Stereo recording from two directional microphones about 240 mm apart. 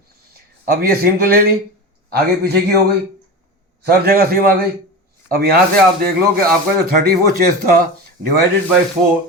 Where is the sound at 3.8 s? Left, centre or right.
Right.